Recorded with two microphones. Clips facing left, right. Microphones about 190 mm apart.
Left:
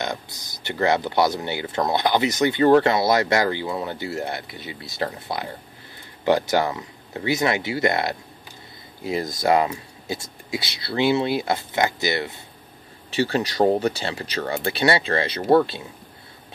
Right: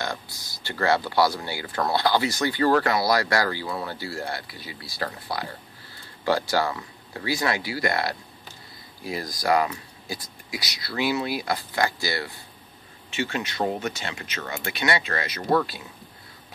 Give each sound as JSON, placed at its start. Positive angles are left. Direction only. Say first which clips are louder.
{"t": 0.0, "sound": "speech", "louder": "left 3 dB", "side_deg": 20}
{"t": 13.1, "sound": "speech", "louder": "left 6 dB", "side_deg": 35}